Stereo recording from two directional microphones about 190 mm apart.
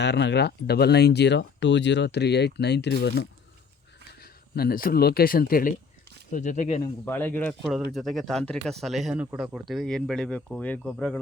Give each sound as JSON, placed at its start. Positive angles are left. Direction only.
{"t": 0.0, "sound": "speech", "side_deg": 65}
{"t": 4.2, "sound": "speech", "side_deg": 55}
{"t": 7.0, "sound": "speech", "side_deg": 10}